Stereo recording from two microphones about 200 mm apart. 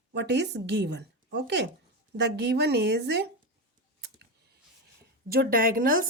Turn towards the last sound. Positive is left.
turn(degrees=-45)  # may be behind; listen again after turning